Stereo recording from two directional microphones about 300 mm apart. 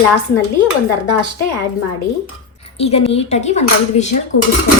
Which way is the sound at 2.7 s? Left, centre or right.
Centre.